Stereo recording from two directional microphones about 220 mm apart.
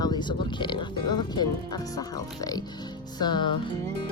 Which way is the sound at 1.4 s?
20° left (ahead or behind).